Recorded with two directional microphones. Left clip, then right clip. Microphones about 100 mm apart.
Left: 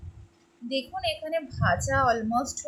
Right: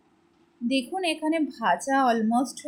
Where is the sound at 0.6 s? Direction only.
35° right (ahead or behind).